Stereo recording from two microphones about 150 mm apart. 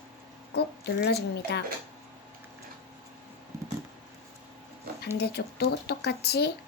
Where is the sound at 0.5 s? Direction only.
90° left.